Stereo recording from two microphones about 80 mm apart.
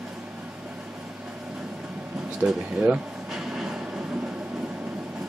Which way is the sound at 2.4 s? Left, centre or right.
Centre.